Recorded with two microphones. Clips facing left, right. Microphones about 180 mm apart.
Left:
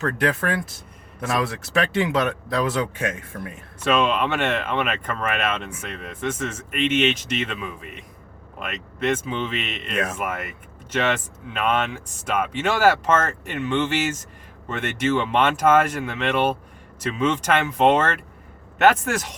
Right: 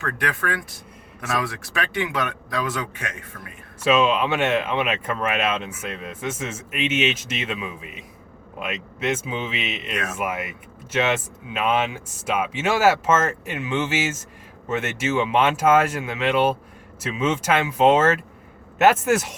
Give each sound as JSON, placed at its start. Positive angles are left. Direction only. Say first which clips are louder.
{"t": 0.0, "sound": "speech", "louder": "left 4 dB", "side_deg": 25}
{"t": 3.8, "sound": "speech", "louder": "right 2 dB", "side_deg": -5}